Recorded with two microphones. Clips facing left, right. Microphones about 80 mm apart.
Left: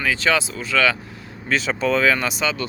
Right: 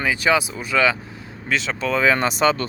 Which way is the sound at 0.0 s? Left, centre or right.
Centre.